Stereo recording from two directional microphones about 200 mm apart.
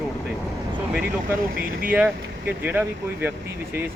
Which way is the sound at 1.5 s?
45° right (ahead or behind).